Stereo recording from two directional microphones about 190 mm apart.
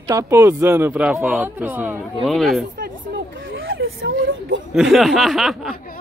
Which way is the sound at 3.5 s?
90° right.